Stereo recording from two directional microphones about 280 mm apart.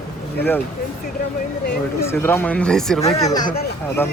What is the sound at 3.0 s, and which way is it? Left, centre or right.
Speech, left.